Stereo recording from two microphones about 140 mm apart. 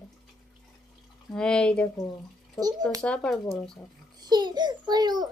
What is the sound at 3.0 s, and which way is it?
Speech, 5° left (ahead or behind).